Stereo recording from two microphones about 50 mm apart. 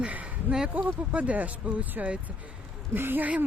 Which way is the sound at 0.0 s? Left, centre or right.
Right.